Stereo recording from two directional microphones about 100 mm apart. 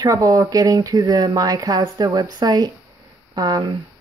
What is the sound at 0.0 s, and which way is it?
Speech, 35° right (ahead or behind).